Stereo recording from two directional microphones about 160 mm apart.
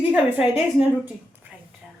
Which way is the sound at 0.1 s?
5° right (ahead or behind).